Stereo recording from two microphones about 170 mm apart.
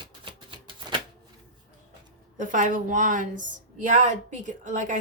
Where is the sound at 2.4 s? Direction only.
50° right (ahead or behind).